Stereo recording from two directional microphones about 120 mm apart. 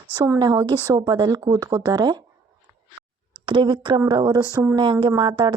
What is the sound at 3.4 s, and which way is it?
Speech, 40° right (ahead or behind).